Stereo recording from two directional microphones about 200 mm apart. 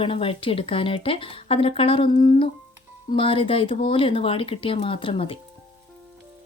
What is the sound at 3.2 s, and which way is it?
A woman's voice, 25° left (ahead or behind).